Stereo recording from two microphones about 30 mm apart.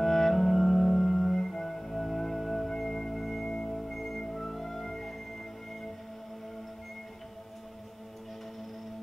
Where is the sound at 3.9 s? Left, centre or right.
Centre.